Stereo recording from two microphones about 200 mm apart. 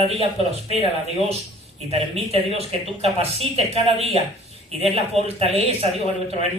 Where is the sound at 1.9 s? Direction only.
30° right (ahead or behind).